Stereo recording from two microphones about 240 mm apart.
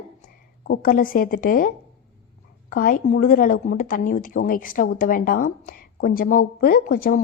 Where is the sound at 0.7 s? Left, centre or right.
Left.